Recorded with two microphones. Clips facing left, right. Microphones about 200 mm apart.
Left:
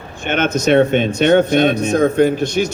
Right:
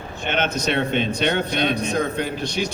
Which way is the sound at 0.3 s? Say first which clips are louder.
Left 8 dB; 50° left (ahead or behind).